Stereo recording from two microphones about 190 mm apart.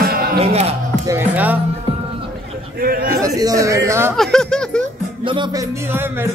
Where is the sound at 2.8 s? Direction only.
50° right (ahead or behind).